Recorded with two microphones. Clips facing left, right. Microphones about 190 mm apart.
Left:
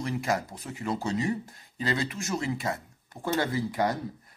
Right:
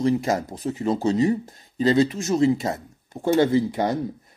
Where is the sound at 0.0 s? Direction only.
25° right (ahead or behind).